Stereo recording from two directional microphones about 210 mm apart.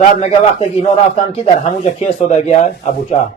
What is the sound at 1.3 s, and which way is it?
Speech, 30° left (ahead or behind).